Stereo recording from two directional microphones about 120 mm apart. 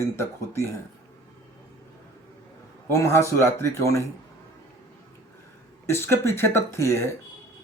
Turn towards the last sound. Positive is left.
turn(degrees=25)  # may be behind; listen again after turning